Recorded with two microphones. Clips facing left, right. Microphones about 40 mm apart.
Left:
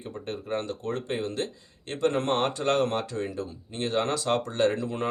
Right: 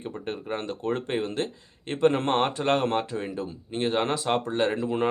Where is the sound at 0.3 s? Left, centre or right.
Right.